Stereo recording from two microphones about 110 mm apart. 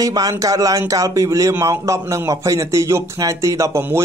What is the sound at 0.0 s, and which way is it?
A man's voice, 35° right (ahead or behind).